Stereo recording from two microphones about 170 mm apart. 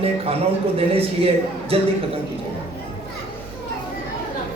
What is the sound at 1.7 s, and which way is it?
Speech, 35° right (ahead or behind).